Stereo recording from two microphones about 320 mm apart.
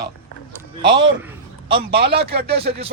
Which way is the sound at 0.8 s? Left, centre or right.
Centre.